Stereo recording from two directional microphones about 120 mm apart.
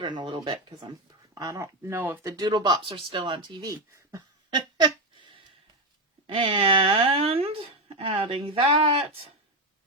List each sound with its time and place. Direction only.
0.0 s speech: 40° right (ahead or behind)
1.4 s speech: 25° right (ahead or behind)
2.2 s speech: 30° right (ahead or behind)
4.5 s a sound: 40° right (ahead or behind)
6.2 s speech: 45° right (ahead or behind)